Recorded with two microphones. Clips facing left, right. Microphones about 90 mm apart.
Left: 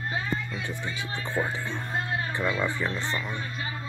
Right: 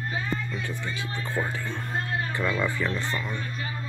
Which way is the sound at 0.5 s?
20° left (ahead or behind).